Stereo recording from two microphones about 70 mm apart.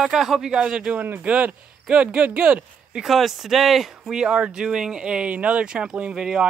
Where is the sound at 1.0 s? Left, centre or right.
Right.